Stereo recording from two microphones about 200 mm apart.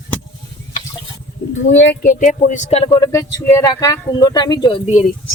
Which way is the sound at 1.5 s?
70° left (ahead or behind).